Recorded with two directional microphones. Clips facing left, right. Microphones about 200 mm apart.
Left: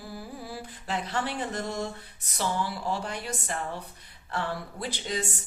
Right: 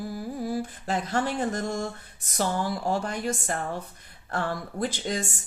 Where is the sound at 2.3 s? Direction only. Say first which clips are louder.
Right 3 dB; 45° right (ahead or behind).